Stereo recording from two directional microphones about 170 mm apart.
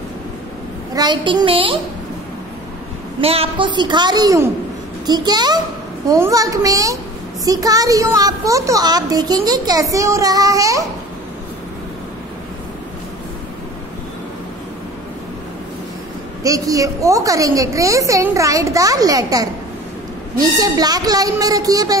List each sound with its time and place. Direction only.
0.9 s a woman's voice: 25° right (ahead or behind)
3.2 s a woman's voice: 35° right (ahead or behind); by 10.9 s 20° right (ahead or behind)
16.4 s a woman's voice: 20° right (ahead or behind)